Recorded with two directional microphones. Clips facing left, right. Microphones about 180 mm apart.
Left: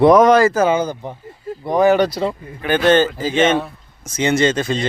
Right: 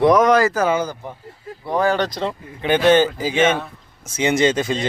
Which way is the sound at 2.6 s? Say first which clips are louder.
Even; 15° right (ahead or behind).